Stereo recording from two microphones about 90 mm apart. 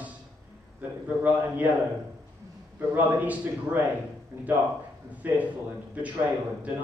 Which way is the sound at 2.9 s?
15° right (ahead or behind).